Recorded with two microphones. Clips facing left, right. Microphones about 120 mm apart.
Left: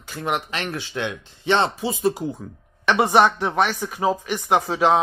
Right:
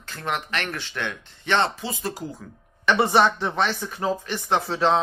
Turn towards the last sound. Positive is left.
turn(degrees=10)  # may be behind; listen again after turning